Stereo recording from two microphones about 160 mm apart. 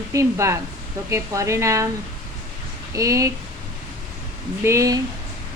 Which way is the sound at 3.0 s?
20° right (ahead or behind).